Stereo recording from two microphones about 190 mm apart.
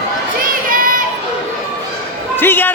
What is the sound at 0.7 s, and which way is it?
Child singing, 45° right (ahead or behind).